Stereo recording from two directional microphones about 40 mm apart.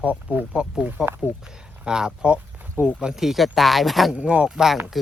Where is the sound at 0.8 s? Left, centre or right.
Right.